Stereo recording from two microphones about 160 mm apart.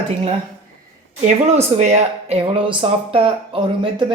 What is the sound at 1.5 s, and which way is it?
Speech, 45° right (ahead or behind).